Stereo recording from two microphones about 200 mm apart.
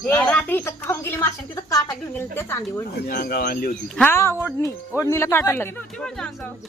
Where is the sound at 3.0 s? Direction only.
45° left (ahead or behind).